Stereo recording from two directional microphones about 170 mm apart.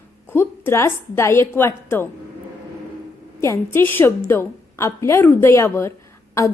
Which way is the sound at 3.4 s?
15° left (ahead or behind).